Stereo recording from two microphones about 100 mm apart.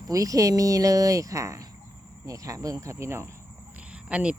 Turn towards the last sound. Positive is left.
turn(degrees=-10)  # may be behind; listen again after turning